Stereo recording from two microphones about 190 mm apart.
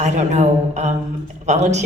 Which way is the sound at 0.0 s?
35° right (ahead or behind).